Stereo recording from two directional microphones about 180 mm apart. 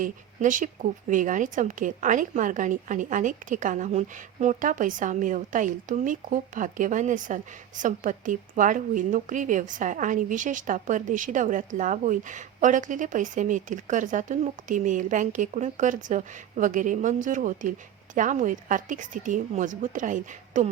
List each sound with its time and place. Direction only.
0.0 s speech: 45° right (ahead or behind)